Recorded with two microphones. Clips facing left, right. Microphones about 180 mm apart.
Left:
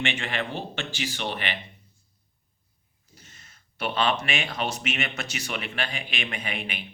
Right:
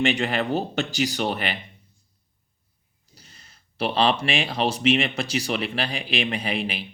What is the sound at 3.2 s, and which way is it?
Speech, 35° right (ahead or behind).